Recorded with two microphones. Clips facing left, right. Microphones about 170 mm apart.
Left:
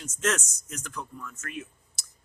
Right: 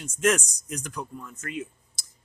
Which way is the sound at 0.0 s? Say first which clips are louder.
Right 5 dB; 10° right (ahead or behind).